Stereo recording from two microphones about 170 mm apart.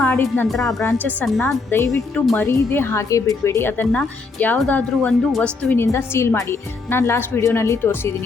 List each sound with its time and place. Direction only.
0.1 s speech: 15° left (ahead or behind)
0.4 s speech: centre (ahead or behind)
0.8 s speech: 15° left (ahead or behind)